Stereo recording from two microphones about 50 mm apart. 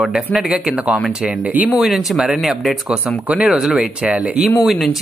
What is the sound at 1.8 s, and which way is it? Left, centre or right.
Speech, centre.